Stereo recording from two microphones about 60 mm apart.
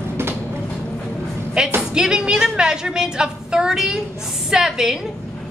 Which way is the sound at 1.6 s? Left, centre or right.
Centre.